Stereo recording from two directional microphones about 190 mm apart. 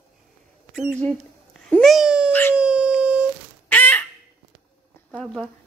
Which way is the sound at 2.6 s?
5° right (ahead or behind).